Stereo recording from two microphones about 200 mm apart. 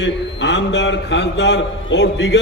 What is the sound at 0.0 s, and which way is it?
A man's voice, 60° left (ahead or behind).